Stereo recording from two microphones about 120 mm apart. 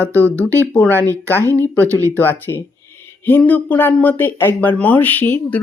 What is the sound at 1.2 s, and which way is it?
Speech, 25° right (ahead or behind).